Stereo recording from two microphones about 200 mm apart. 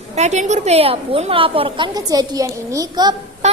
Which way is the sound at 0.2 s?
35° right (ahead or behind).